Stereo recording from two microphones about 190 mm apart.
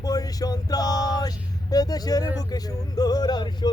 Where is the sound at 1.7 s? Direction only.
20° left (ahead or behind).